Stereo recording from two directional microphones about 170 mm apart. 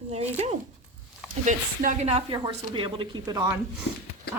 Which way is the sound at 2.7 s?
30° right (ahead or behind).